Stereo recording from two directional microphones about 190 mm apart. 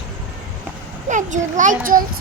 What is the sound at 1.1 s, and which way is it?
Children playing, 40° right (ahead or behind).